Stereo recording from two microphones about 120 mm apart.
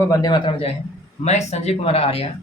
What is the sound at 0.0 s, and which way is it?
Speech, 30° left (ahead or behind).